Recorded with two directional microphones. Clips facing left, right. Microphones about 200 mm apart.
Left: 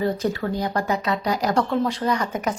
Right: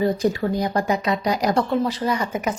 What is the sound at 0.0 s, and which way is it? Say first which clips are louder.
A woman's voice: right 3 dB; 15° right (ahead or behind).